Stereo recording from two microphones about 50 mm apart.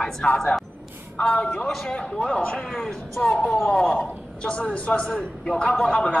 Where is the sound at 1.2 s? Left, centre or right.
Left.